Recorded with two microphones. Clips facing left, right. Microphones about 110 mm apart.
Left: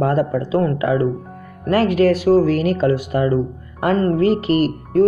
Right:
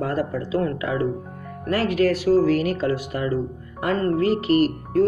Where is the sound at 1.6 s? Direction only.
55° left (ahead or behind).